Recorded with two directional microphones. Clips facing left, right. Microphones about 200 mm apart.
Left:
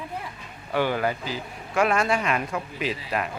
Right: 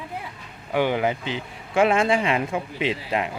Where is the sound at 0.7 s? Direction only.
15° right (ahead or behind).